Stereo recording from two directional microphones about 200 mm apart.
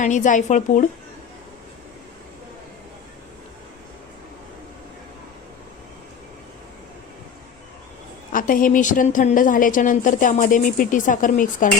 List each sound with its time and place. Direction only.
0.0 s a woman's voice: 40° left (ahead or behind)
8.3 s a woman's voice: 45° left (ahead or behind)